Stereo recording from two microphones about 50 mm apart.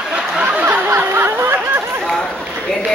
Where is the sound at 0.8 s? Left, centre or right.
Right.